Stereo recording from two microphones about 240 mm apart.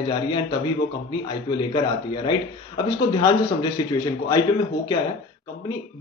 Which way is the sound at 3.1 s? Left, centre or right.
Centre.